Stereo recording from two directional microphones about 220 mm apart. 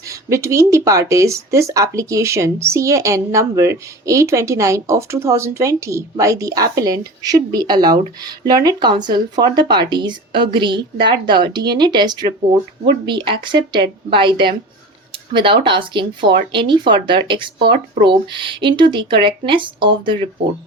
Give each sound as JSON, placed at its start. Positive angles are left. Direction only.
{"t": 0.0, "sound": "speech", "side_deg": -15}